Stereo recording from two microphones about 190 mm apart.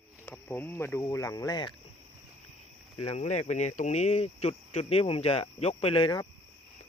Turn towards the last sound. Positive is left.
turn(degrees=25)  # may be behind; listen again after turning